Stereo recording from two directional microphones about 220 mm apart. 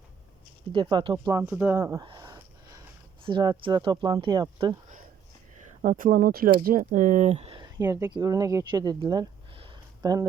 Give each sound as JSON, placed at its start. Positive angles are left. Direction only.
{"t": 0.7, "sound": "speech", "side_deg": -20}
{"t": 5.8, "sound": "speech", "side_deg": -40}